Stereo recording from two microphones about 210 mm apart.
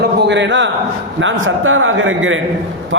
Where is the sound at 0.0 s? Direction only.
55° right (ahead or behind).